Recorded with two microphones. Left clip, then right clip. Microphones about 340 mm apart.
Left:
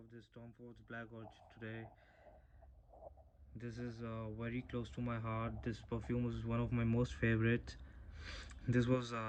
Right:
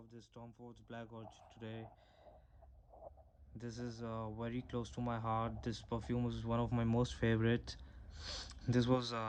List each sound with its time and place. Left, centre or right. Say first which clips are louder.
1.2 s speech: even; right
3.6 s speech: right 1 dB; centre